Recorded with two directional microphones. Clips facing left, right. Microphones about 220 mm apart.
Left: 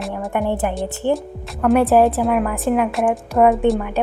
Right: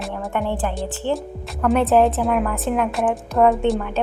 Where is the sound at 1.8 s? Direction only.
10° left (ahead or behind).